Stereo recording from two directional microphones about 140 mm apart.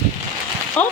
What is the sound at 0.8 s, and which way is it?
Speech, 10° left (ahead or behind).